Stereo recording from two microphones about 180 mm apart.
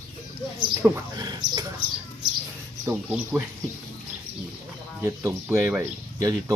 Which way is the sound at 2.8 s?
10° right (ahead or behind).